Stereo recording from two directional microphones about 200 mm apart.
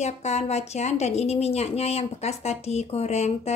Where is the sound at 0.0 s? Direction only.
35° left (ahead or behind).